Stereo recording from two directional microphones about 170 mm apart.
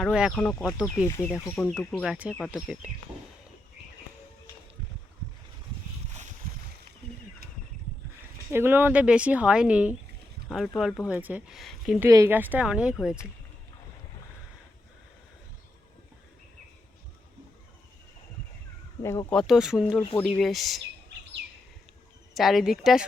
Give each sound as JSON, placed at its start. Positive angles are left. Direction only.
{"t": 0.0, "sound": "speech", "side_deg": -5}
{"t": 1.0, "sound": "speech", "side_deg": 15}
{"t": 1.8, "sound": "speech", "side_deg": 0}
{"t": 8.4, "sound": "speech", "side_deg": -15}
{"t": 11.9, "sound": "speech", "side_deg": -15}
{"t": 19.3, "sound": "speech", "side_deg": 0}
{"t": 22.4, "sound": "speech", "side_deg": 0}